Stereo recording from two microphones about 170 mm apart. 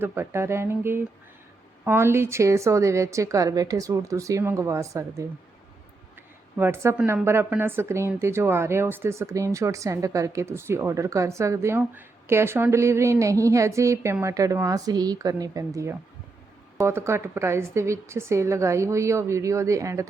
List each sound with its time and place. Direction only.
0.0 s speech: 15° right (ahead or behind)
6.6 s speech: 15° right (ahead or behind)